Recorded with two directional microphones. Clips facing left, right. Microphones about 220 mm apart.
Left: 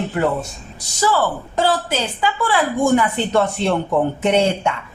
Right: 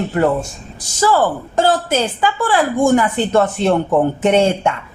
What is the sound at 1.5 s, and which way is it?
A woman's voice, 45° right (ahead or behind).